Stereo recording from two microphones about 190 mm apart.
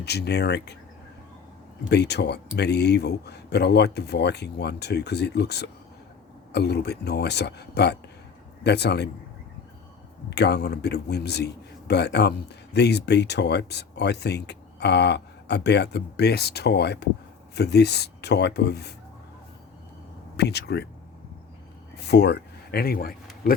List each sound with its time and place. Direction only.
0.0 s speech: 60° left (ahead or behind)
1.9 s speech: 60° left (ahead or behind)
10.2 s speech: 60° left (ahead or behind)
20.3 s speech: 60° left (ahead or behind)
21.9 s speech: 60° left (ahead or behind)